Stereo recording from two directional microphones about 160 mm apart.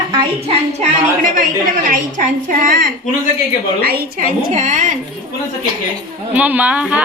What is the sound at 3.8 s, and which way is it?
Speech, 75° right (ahead or behind).